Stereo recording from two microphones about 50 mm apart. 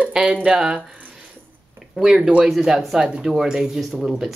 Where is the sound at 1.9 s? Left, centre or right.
Centre.